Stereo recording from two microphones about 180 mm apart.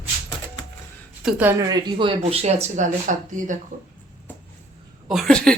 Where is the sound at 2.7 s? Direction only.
45° right (ahead or behind).